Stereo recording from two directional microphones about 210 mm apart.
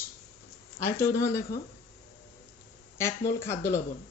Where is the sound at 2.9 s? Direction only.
10° left (ahead or behind).